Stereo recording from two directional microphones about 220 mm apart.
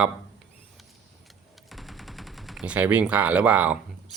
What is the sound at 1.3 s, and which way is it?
Gunshot, centre (ahead or behind).